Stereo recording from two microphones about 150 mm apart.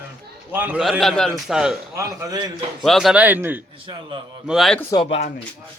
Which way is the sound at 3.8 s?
35° right (ahead or behind).